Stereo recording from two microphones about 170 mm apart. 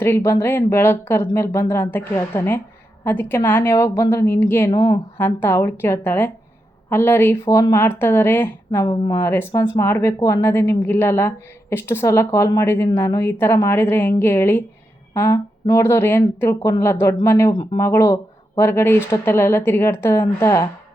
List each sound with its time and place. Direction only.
0.0 s speech: 15° left (ahead or behind)